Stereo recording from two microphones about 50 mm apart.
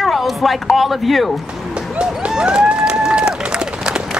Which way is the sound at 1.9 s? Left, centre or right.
Centre.